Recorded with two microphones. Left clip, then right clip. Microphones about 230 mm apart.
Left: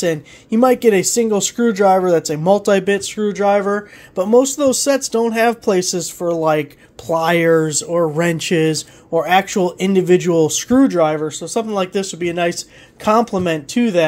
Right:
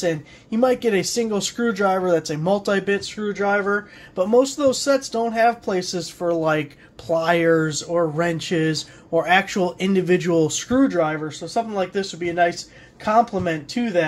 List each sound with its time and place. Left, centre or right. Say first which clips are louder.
0.0 s speech: left 4 dB; left